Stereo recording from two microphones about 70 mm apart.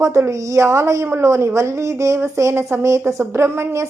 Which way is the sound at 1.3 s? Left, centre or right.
Right.